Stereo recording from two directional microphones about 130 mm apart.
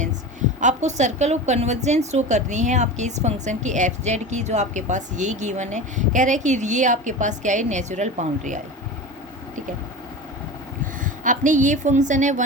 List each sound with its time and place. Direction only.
0.6 s a woman's voice: 65° right (ahead or behind)
11.0 s a woman's voice: 85° right